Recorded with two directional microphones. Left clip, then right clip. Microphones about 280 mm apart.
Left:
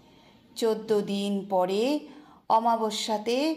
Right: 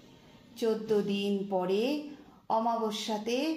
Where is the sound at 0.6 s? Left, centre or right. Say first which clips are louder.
Left 3 dB; left.